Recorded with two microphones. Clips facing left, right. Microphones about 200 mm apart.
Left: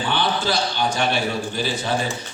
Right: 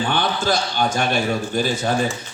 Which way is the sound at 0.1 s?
45° right (ahead or behind).